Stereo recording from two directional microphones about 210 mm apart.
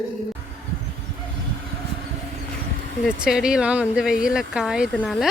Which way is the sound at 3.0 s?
Centre (ahead or behind).